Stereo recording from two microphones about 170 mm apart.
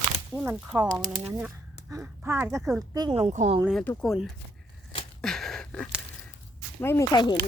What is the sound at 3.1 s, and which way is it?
Speech, 40° right (ahead or behind).